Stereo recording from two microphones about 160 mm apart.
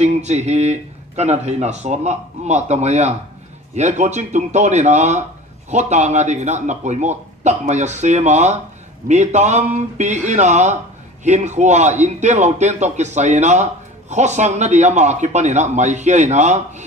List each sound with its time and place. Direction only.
0.0 s a man's voice: 45° right (ahead or behind)